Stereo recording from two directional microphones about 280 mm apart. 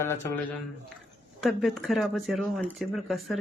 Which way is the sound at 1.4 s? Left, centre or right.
Centre.